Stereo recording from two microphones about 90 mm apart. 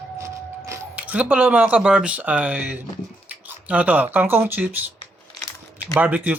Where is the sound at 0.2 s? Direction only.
35° right (ahead or behind).